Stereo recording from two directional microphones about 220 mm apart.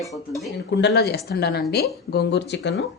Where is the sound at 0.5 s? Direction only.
50° left (ahead or behind).